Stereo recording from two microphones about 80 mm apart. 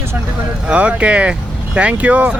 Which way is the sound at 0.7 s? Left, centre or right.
Centre.